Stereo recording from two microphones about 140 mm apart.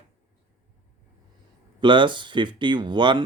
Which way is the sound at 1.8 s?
35° right (ahead or behind).